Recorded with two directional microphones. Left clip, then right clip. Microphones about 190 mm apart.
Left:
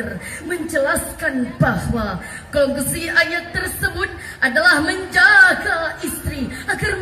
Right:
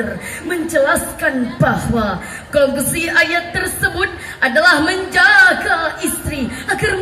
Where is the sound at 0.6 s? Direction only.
25° right (ahead or behind).